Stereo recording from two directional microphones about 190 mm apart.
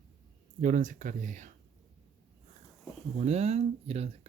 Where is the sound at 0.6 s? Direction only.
45° right (ahead or behind).